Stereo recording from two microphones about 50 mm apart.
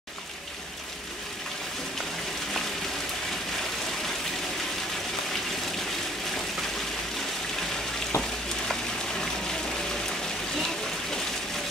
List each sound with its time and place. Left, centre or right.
8.1 s frying: left